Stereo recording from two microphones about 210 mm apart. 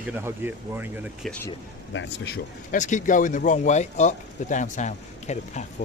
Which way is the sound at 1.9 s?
60° left (ahead or behind).